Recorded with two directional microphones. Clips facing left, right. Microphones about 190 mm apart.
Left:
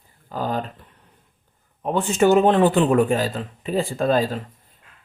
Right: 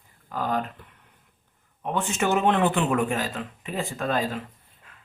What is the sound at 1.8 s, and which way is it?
Speech, 35° left (ahead or behind).